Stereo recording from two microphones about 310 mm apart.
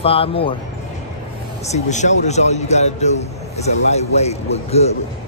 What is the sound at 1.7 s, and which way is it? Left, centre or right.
A man's voice, left.